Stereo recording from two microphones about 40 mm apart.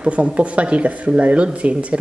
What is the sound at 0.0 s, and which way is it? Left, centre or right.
Speech, right.